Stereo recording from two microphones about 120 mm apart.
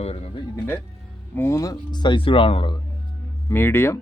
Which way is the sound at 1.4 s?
25° left (ahead or behind).